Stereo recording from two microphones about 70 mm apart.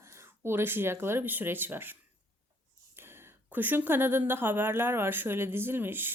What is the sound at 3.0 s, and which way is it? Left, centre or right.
A woman's voice, right.